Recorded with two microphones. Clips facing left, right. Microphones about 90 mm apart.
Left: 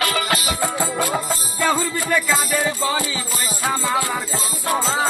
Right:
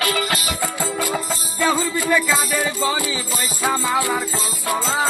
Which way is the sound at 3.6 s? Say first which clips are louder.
Right 1 dB; 10° right (ahead or behind).